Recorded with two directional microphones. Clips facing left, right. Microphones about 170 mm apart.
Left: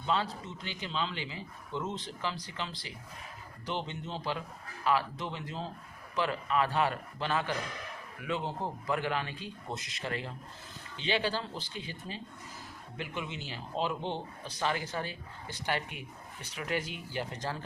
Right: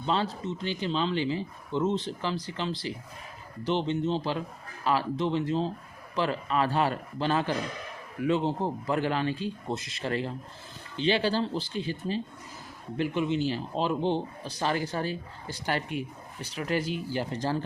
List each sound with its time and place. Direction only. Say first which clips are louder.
0.0 s a man's voice: right 4 dB; 30° right (ahead or behind)
13.0 s speech: right 12 dB; 35° right (ahead or behind)